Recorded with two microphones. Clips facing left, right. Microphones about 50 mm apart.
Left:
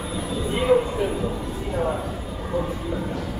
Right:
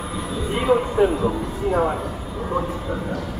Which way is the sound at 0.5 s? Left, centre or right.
Centre.